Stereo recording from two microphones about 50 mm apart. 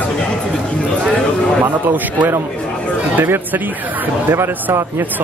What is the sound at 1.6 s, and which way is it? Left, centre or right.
A man's voice, right.